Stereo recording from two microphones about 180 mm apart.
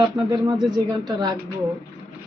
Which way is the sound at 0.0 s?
20° right (ahead or behind).